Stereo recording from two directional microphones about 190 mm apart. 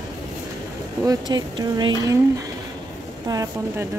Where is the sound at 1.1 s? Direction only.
20° right (ahead or behind).